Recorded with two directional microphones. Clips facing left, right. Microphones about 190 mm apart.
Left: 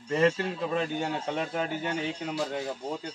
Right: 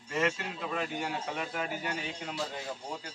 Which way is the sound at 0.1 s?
30° left (ahead or behind).